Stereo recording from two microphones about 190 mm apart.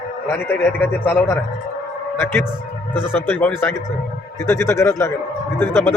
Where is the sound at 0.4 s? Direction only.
10° left (ahead or behind).